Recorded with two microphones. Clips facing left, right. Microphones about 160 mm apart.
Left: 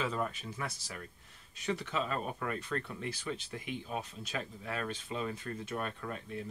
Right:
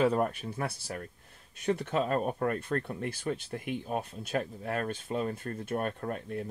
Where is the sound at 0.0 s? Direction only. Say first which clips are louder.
Right 8 dB; 55° right (ahead or behind).